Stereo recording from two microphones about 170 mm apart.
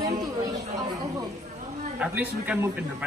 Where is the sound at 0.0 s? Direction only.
20° right (ahead or behind).